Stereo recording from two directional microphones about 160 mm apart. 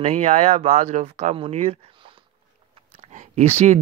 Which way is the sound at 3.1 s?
45° right (ahead or behind).